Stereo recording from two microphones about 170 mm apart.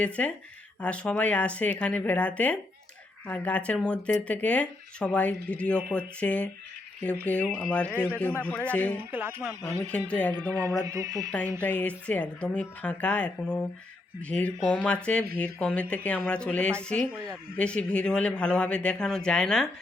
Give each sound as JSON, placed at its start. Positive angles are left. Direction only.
{"t": 0.2, "sound": "speech", "side_deg": 10}
{"t": 9.0, "sound": "speech", "side_deg": -10}
{"t": 10.1, "sound": "speech", "side_deg": 10}
{"t": 10.5, "sound": "music", "side_deg": -20}
{"t": 11.6, "sound": "a man's voice", "side_deg": 10}